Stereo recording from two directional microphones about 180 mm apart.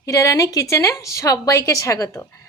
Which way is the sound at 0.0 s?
15° left (ahead or behind).